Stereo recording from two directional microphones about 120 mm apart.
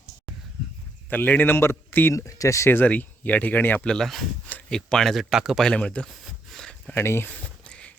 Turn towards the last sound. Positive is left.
turn(degrees=10)  # may be behind; listen again after turning